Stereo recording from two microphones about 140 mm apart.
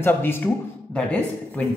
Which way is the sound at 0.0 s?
15° left (ahead or behind).